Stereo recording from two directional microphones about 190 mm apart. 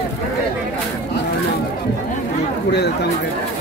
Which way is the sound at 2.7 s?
60° left (ahead or behind).